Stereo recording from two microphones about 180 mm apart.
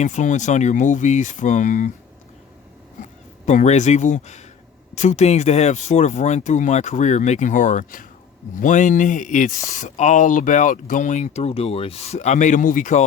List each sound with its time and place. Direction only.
0.0 s speech: 40° left (ahead or behind)
3.0 s speech: 40° left (ahead or behind)